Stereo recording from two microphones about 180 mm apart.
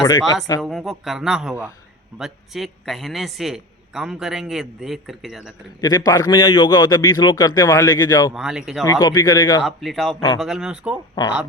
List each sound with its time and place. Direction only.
0.0 s a man's voice: 20° left (ahead or behind)
0.6 s a woman's voice: centre (ahead or behind)
5.8 s a man's voice: 20° left (ahead or behind)
8.3 s a woman's voice: 5° right (ahead or behind)
8.8 s a man's voice: 20° left (ahead or behind)
9.6 s a woman's voice: centre (ahead or behind)
10.2 s a man's voice: 20° left (ahead or behind)
10.4 s a woman's voice: 5° right (ahead or behind)
11.1 s a man's voice: 25° left (ahead or behind)